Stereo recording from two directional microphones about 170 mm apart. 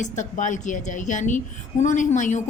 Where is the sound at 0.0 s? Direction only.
45° left (ahead or behind).